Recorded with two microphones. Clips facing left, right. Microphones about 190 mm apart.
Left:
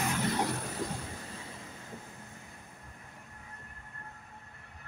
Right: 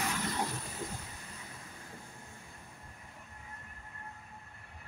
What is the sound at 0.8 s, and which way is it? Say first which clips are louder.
Vehicle: left 4 dB; 80° left.